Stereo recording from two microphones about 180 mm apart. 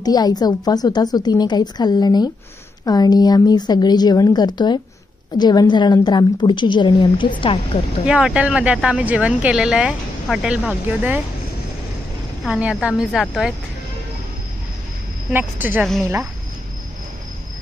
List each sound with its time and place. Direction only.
0.0 s a woman's voice: 20° left (ahead or behind)
8.0 s speech: 5° right (ahead or behind)
12.4 s speech: 5° right (ahead or behind)
15.3 s speech: 10° right (ahead or behind)